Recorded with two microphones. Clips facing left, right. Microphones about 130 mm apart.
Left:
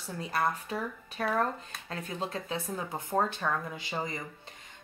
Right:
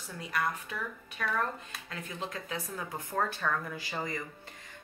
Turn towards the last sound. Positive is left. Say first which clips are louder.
# left 1 dB
turn(degrees=20)  # may be behind; listen again after turning